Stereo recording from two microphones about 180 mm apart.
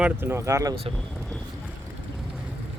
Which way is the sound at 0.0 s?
10° right (ahead or behind).